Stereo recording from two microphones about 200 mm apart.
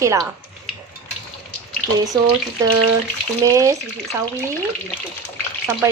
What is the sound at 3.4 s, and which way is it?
Speech, 15° right (ahead or behind).